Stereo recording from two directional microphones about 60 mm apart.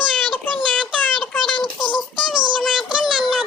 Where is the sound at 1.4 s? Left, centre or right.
Centre.